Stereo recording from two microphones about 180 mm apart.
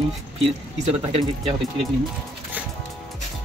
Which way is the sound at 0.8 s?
35° right (ahead or behind).